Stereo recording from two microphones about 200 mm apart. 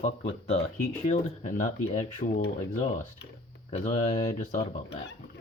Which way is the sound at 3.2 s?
60° left (ahead or behind).